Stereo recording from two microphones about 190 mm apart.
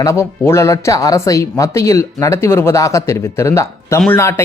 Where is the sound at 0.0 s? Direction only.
15° left (ahead or behind).